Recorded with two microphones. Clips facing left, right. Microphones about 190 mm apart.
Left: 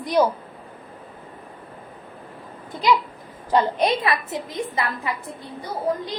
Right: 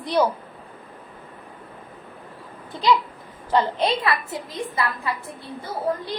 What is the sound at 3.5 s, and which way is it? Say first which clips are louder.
A woman's voice: left 1 dB; 15° left (ahead or behind).